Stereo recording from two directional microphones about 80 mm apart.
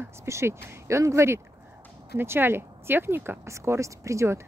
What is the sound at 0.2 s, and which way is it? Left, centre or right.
Speech, right.